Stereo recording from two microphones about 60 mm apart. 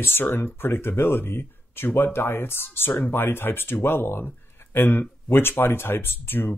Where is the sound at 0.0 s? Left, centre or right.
Left.